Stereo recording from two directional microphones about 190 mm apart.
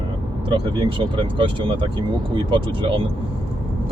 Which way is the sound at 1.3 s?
25° right (ahead or behind).